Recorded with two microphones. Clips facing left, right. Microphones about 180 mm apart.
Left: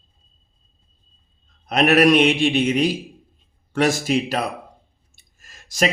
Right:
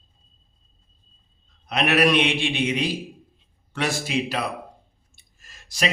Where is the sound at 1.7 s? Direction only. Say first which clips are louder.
Left 5 dB; 45° left (ahead or behind).